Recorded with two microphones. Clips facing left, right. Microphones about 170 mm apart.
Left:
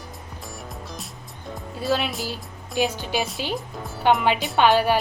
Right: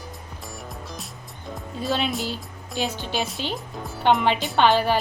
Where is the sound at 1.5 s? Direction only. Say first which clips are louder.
Left 2 dB; centre (ahead or behind).